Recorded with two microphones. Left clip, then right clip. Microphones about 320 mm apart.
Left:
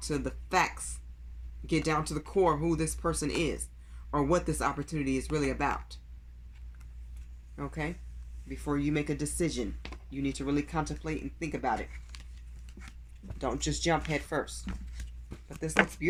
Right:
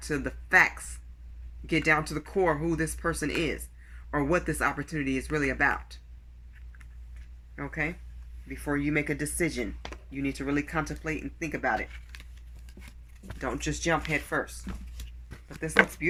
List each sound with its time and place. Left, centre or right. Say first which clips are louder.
0.0 s speech: right 2 dB; centre
7.5 s speech: right 5 dB; centre
13.4 s speech: right 1 dB; left
15.4 s speech: right 4 dB; centre